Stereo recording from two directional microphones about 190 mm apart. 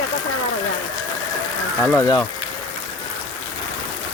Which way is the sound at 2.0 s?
20° left (ahead or behind).